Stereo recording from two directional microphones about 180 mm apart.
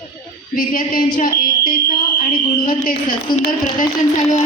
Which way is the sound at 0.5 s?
50° left (ahead or behind).